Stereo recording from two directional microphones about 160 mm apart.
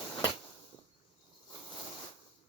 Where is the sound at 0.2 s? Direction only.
30° left (ahead or behind).